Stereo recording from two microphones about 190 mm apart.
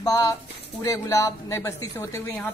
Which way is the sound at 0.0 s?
20° left (ahead or behind).